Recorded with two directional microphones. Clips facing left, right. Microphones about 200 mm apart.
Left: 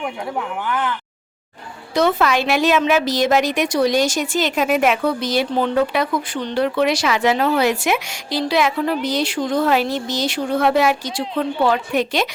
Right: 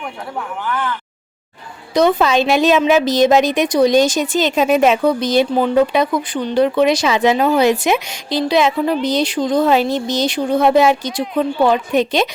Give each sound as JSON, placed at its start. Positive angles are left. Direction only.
{"t": 1.9, "sound": "a woman's voice", "side_deg": -15}